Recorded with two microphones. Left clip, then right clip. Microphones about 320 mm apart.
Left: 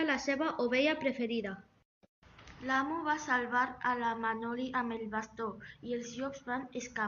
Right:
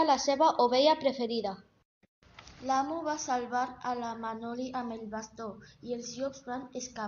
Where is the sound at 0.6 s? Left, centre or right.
Right.